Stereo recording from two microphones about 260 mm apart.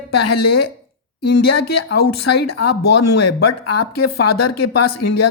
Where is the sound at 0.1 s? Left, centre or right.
Left.